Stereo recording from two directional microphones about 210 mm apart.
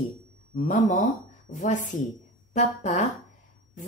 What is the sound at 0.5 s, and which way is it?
A woman's voice, 35° left (ahead or behind).